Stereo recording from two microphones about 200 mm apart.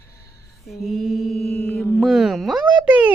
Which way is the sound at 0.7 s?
Centre (ahead or behind).